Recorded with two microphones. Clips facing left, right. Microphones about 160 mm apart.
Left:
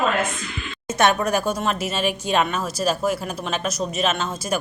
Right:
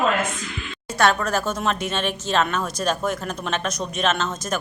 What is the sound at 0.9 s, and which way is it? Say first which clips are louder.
Speech: left 1 dB; 20° left (ahead or behind).